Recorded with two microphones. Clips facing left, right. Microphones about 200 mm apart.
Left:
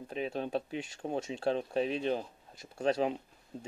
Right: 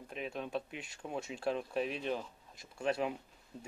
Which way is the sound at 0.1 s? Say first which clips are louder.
Left 5 dB; 35° left (ahead or behind).